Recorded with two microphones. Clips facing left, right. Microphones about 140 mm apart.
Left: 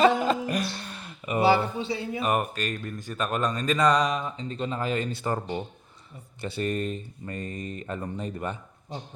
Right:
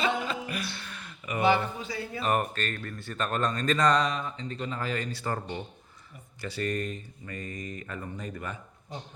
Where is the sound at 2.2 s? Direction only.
10° left (ahead or behind); by 8.9 s 25° left (ahead or behind).